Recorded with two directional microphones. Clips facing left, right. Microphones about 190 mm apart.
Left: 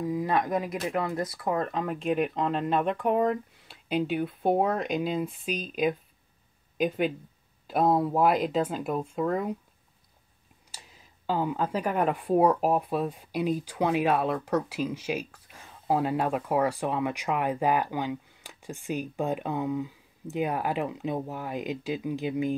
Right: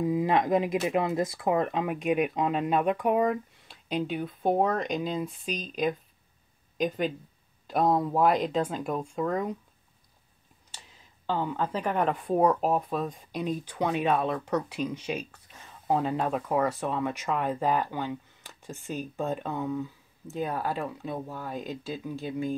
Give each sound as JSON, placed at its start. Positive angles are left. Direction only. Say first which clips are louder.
{"t": 0.0, "sound": "speech", "louder": "right 2 dB", "side_deg": -20}
{"t": 2.0, "sound": "speech", "louder": "even", "side_deg": -5}
{"t": 7.6, "sound": "speech", "louder": "left 1 dB", "side_deg": 5}
{"t": 11.2, "sound": "speech", "louder": "left 1 dB", "side_deg": 10}